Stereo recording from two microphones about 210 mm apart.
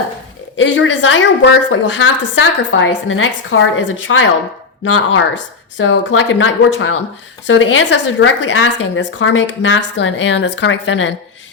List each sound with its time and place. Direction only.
0.5 s a woman's voice: 65° left (ahead or behind)